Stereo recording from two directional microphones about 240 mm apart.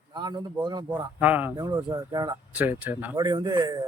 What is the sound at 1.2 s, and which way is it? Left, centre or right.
A man's voice, centre.